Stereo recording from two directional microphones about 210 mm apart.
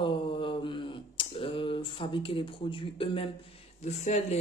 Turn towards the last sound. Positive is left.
turn(degrees=30)  # may be behind; listen again after turning